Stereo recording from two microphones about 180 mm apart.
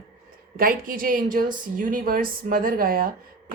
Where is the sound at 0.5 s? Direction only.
55° right (ahead or behind).